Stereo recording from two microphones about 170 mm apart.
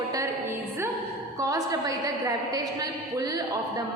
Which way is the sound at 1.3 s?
20° right (ahead or behind).